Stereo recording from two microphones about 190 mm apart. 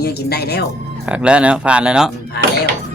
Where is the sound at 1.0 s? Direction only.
5° right (ahead or behind).